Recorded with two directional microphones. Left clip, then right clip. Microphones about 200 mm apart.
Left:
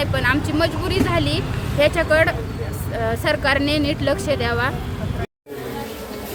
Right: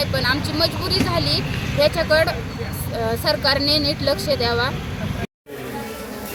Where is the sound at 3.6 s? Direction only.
25° left (ahead or behind).